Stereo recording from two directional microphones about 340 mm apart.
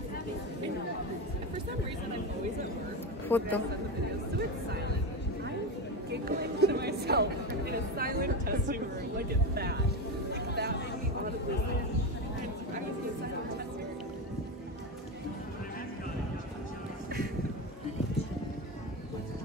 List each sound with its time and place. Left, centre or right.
3.3 s a man's voice: centre
6.2 s speech: right
10.3 s chatter: right